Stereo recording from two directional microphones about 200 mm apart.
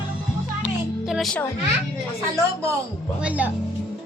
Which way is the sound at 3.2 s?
5° right (ahead or behind).